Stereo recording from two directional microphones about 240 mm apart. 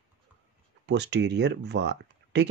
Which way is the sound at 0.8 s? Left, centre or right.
Right.